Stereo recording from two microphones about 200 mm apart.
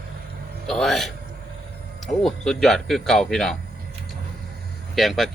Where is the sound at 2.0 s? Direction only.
Centre (ahead or behind).